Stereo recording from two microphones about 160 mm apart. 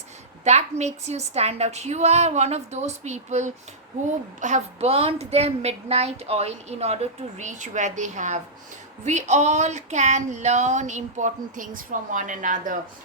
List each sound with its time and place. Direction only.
0.4 s speech: 45° right (ahead or behind)